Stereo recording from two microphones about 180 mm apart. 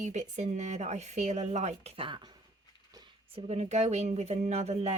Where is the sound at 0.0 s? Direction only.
40° right (ahead or behind).